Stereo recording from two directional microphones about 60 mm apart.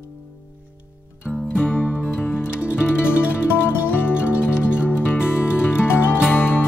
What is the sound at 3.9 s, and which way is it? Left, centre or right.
Music, left.